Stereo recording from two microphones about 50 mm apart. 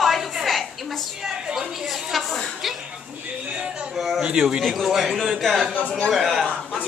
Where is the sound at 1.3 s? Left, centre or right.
Centre.